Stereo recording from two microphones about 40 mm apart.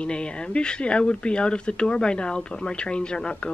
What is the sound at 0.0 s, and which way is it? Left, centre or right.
Speech, left.